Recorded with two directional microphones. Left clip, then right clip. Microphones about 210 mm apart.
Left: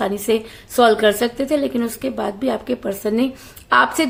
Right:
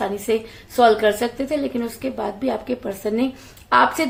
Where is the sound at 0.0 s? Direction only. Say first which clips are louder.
Left 3 dB; 30° left (ahead or behind).